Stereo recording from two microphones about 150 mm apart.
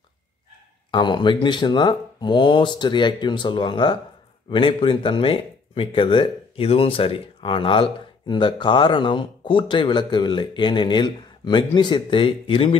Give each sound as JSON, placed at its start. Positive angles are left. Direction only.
{"t": 0.9, "sound": "speech", "side_deg": 30}